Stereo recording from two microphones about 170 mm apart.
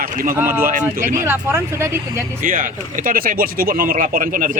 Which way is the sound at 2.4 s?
55° right (ahead or behind).